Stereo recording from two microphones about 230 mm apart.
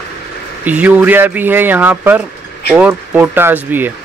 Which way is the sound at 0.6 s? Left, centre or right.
Centre.